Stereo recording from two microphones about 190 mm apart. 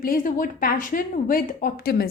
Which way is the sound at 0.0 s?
45° left (ahead or behind).